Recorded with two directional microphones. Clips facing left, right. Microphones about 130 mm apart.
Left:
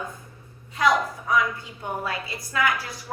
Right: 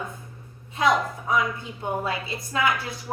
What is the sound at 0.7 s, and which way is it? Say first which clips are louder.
A woman's voice: even; 25° right (ahead or behind).